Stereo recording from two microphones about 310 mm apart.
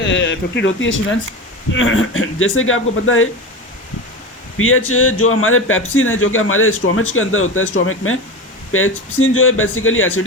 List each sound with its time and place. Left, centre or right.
0.0 s speech: left
4.5 s speech: left